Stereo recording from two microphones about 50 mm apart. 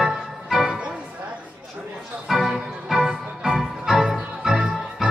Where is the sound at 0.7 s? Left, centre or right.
Right.